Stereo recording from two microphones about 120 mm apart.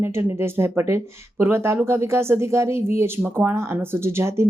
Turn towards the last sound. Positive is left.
turn(degrees=-20)  # may be behind; listen again after turning